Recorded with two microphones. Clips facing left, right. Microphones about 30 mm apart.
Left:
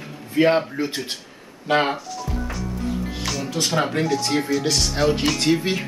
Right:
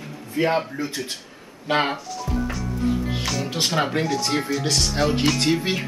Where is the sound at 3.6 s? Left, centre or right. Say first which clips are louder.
Left 1 dB; centre.